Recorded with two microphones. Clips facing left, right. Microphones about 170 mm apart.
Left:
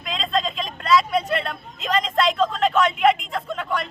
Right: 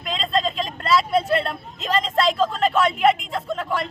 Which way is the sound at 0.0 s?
Centre (ahead or behind).